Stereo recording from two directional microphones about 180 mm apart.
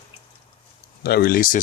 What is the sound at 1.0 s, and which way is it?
Speech, 60° left (ahead or behind).